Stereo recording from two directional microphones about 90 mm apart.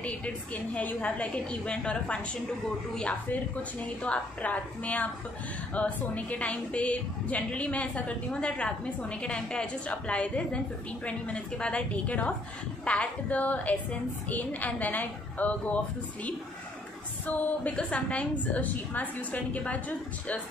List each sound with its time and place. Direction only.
0.7 s a woman's voice: 15° left (ahead or behind)
17.3 s a woman's voice: 15° left (ahead or behind)